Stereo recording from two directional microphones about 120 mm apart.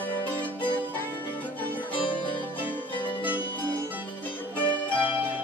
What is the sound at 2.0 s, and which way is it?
Music, 45° left (ahead or behind).